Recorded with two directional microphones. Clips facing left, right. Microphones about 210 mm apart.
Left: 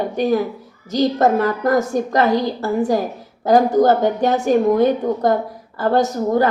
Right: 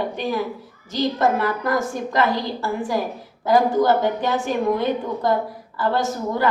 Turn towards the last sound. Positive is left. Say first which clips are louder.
# left 6 dB
turn(degrees=45)  # may be behind; listen again after turning